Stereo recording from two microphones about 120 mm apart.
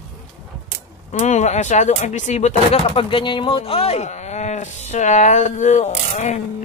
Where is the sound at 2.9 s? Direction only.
45° left (ahead or behind).